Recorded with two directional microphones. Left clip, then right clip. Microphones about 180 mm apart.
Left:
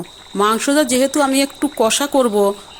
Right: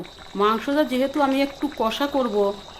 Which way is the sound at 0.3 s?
40° left (ahead or behind).